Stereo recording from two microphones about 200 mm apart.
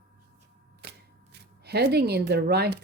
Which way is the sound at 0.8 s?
55° right (ahead or behind).